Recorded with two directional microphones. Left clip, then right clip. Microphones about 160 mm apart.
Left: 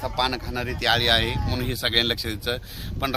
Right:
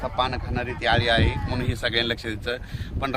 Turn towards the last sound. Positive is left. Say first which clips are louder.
# left 1 dB
turn(degrees=-5)  # may be behind; listen again after turning